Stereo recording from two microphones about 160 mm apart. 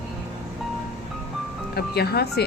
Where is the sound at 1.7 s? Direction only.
90° left.